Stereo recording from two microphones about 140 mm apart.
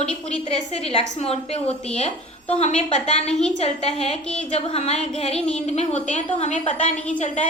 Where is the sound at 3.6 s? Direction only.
45° left (ahead or behind).